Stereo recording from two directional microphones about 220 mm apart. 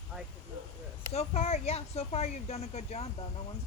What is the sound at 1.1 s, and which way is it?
Speech, 30° left (ahead or behind).